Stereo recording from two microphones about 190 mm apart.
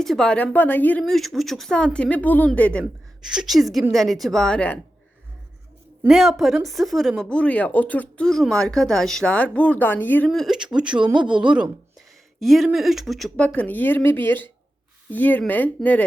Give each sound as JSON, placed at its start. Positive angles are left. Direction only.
{"t": 0.0, "sound": "speech", "side_deg": 5}
{"t": 6.1, "sound": "speech", "side_deg": 0}